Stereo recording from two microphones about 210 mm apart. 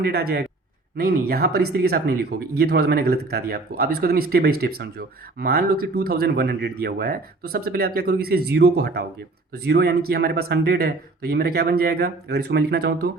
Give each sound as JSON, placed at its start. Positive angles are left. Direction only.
{"t": 0.0, "sound": "speech", "side_deg": -45}